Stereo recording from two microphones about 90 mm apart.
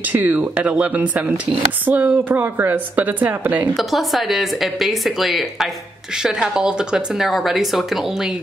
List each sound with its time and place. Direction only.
0.0 s a woman's voice: 15° right (ahead or behind)
3.7 s speech: centre (ahead or behind)